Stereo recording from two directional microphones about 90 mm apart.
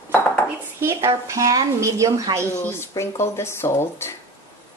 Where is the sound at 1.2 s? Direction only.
40° right (ahead or behind).